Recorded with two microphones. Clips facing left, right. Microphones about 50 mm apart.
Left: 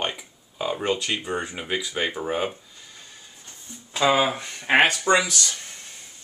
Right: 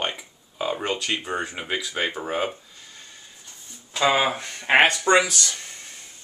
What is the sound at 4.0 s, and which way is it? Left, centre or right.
Speech, centre.